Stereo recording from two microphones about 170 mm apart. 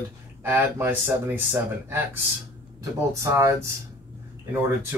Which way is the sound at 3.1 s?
20° right (ahead or behind).